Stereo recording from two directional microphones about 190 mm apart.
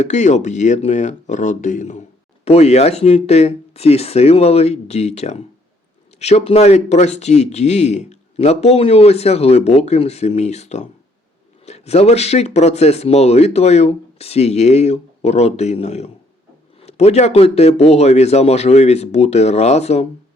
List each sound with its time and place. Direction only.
0.0 s speech: 40° left (ahead or behind)